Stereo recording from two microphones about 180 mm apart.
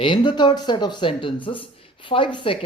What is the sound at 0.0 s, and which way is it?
Speech, 25° left (ahead or behind).